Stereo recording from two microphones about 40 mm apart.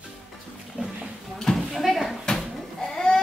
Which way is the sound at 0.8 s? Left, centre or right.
Right.